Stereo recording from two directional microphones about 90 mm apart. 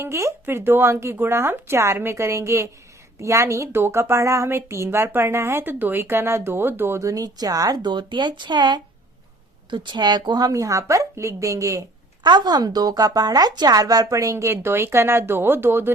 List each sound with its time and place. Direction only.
0.0 s a woman's voice: 30° right (ahead or behind)
12.2 s a woman's voice: 50° right (ahead or behind); by 15.9 s 25° right (ahead or behind)